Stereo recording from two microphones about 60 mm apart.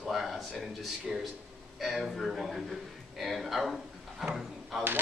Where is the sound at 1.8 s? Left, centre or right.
Centre.